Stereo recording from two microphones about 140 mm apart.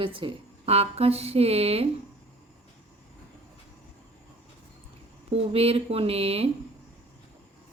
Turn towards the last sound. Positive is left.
turn(degrees=-45)  # may be behind; listen again after turning